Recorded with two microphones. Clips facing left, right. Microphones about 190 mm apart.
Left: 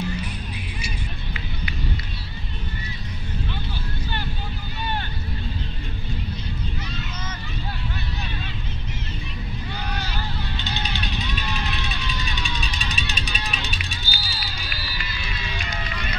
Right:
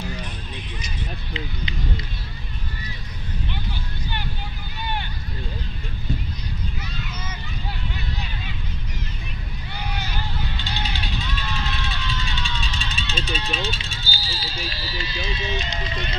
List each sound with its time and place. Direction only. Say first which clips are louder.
10.6 s vehicle: left 1 dB; 20° left (ahead or behind)
14.1 s run: right 2 dB; 25° right (ahead or behind)